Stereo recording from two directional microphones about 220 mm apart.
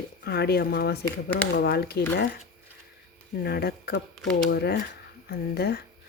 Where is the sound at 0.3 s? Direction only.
45° left (ahead or behind).